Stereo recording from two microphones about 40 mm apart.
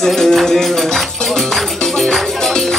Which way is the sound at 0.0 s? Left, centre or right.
Centre.